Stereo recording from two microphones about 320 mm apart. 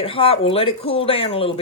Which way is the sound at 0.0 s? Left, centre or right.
Centre.